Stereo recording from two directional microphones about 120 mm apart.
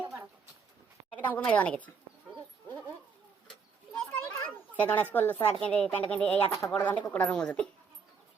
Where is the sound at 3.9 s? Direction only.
10° left (ahead or behind).